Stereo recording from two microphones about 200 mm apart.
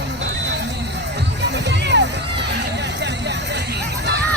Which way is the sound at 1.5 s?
60° right (ahead or behind).